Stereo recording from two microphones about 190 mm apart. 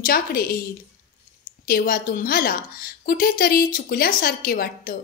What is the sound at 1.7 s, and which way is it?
A woman's voice, 45° left (ahead or behind).